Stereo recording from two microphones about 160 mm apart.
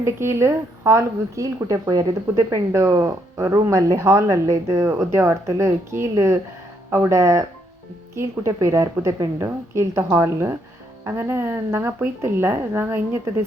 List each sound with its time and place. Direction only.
0.0 s a woman's voice: 15° right (ahead or behind)